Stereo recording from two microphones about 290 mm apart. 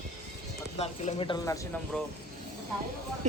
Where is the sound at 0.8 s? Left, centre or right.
Centre.